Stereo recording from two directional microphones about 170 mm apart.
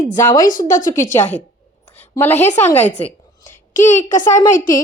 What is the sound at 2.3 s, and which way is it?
Speech, 40° left (ahead or behind).